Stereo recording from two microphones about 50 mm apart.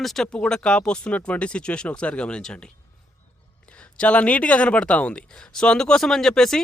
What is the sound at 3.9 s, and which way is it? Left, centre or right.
Speech, left.